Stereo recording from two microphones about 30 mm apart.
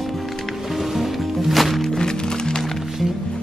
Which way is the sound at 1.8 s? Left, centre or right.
Centre.